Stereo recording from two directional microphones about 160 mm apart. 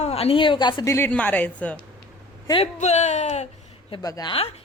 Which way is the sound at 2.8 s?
45° left (ahead or behind).